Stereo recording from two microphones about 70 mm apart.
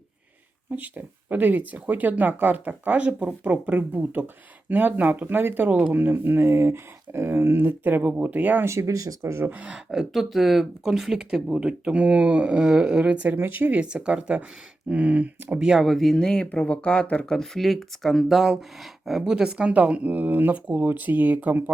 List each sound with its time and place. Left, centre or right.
0.7 s speech: right
8.6 s speech: right
9.5 s speech: centre
9.7 s speech: centre
13.2 s speech: right
13.7 s speech: centre
15.6 s speech: centre; by 21.6 s right